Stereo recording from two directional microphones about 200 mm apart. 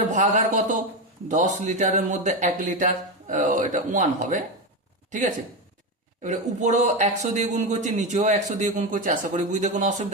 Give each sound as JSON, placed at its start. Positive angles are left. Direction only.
{"t": 0.0, "sound": "speech", "side_deg": -40}
{"t": 6.2, "sound": "speech", "side_deg": -35}